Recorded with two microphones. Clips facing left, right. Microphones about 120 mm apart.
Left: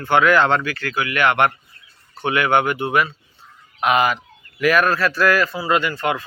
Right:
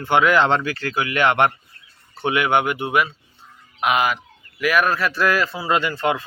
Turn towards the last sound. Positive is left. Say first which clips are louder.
# even
turn(degrees=-25)  # may be behind; listen again after turning